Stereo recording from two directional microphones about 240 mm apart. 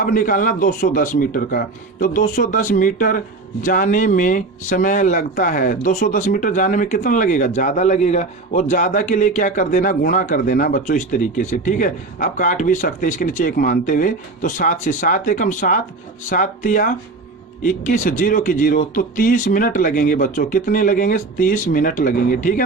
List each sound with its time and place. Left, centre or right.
0.0 s speech: left